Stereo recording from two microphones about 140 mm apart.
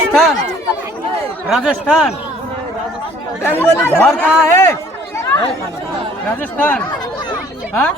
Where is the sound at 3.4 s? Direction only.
15° left (ahead or behind).